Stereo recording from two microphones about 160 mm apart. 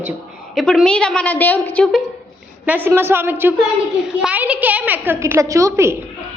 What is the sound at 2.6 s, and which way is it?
A child's voice, 10° right (ahead or behind).